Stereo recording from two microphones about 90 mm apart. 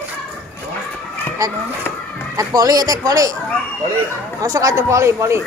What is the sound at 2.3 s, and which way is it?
Speech, 45° right (ahead or behind).